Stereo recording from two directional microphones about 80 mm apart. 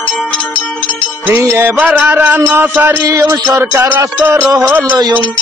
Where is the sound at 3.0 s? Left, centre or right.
Right.